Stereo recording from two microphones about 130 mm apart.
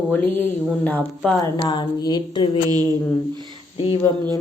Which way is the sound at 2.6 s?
30° right (ahead or behind).